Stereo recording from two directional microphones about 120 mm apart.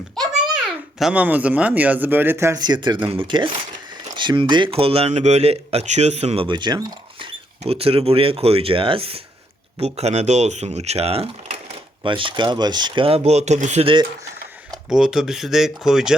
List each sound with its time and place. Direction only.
0.2 s a sound: centre (ahead or behind)
0.6 s speech: 5° right (ahead or behind); by 2.6 s 20° right (ahead or behind)
2.6 s speech: 40° right (ahead or behind)
7.6 s speech: 55° right (ahead or behind)
9.8 s speech: 65° right (ahead or behind)
12.0 s speech: 45° right (ahead or behind); by 13.8 s 75° right (ahead or behind)
13.8 s speech: 40° right (ahead or behind)
14.8 s speech: 5° right (ahead or behind)